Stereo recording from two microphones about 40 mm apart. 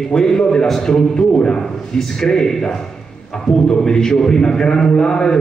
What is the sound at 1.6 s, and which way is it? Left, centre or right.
A man's voice, centre.